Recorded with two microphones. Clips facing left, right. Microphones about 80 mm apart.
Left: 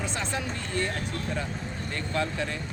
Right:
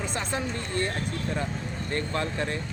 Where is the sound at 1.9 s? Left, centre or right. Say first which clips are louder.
Right 1 dB; right.